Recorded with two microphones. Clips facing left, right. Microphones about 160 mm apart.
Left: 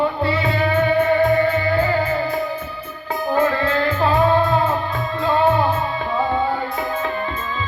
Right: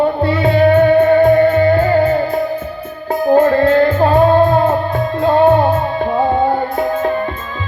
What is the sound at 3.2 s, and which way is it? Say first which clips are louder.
Music: right 9 dB; 50° right (ahead or behind).